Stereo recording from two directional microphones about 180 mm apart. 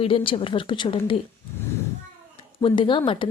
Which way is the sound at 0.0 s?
30° left (ahead or behind).